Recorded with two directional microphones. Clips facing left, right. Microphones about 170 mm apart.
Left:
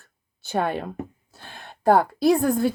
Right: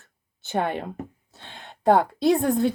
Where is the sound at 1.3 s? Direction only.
20° right (ahead or behind).